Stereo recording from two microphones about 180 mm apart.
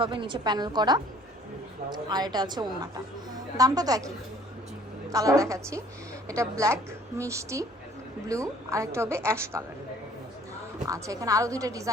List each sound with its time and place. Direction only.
0.0 s a woman's voice: 30° right (ahead or behind)
5.1 s a woman's voice: 20° right (ahead or behind)
10.8 s a woman's voice: 20° right (ahead or behind)